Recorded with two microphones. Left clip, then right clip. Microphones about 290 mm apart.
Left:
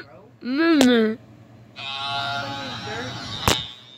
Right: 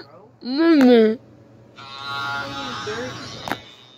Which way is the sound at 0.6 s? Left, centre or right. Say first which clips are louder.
Right 4 dB; centre.